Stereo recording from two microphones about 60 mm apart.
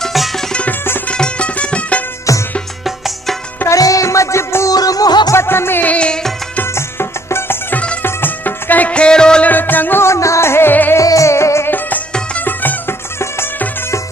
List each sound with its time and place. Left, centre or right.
0.0 s music: centre
0.5 s music: left
3.7 s music: left
4.6 s music: left
5.3 s music: left
5.9 s music: centre
6.7 s music: left; by 9.5 s centre
9.5 s music: left
10.0 s music: left
10.7 s music: left
11.0 s music: left